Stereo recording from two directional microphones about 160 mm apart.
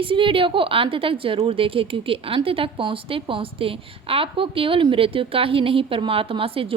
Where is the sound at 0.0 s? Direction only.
35° right (ahead or behind).